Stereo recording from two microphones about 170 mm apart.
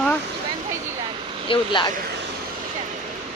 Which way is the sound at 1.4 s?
30° left (ahead or behind).